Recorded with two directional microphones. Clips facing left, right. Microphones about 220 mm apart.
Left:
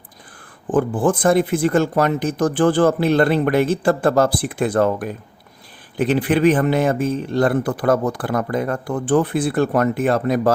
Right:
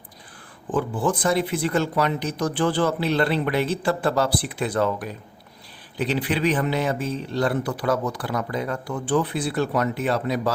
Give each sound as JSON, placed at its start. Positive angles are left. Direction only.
{"t": 0.7, "sound": "speech", "side_deg": 50}